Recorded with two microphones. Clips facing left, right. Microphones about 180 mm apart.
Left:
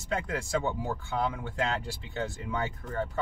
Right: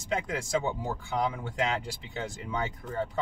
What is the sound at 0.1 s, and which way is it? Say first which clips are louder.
Speech: right 1 dB; 15° right (ahead or behind).